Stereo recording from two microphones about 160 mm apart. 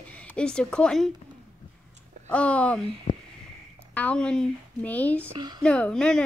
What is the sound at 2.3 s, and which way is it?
Speech, 10° left (ahead or behind).